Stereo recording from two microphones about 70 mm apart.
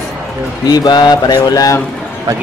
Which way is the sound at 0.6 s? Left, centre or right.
Left.